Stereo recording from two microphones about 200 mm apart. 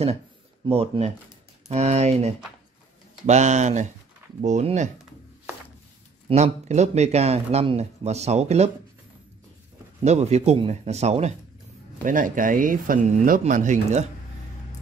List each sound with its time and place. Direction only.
0.7 s speech: 30° right (ahead or behind)
6.2 s speech: 35° right (ahead or behind)
10.0 s speech: 35° right (ahead or behind)